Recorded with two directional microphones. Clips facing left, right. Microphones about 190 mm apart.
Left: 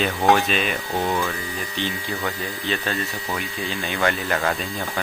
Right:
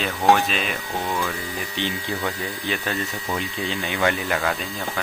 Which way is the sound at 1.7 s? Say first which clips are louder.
Right 1 dB; 15° right (ahead or behind).